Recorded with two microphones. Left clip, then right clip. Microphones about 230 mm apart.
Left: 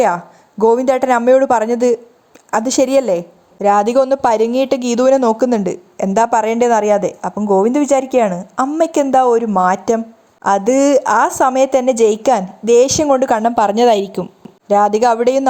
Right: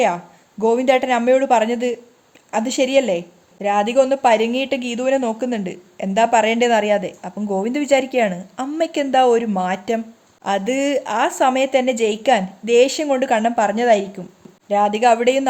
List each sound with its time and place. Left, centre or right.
0.6 s a woman's voice: centre